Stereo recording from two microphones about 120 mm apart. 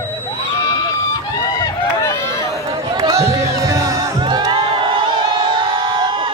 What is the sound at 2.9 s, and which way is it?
Music, 30° right (ahead or behind).